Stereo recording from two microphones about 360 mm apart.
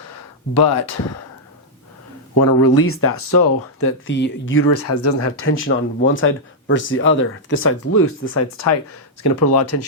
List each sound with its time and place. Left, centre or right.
2.4 s speech: left
8.5 s speech: left